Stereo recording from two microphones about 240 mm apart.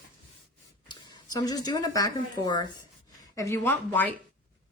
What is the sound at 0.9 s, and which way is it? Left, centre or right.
A woman's voice, centre.